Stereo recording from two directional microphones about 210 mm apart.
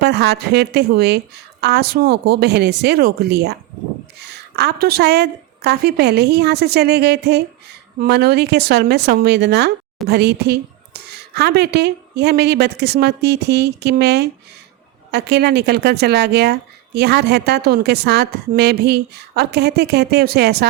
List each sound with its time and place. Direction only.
0.0 s speech: 50° right (ahead or behind)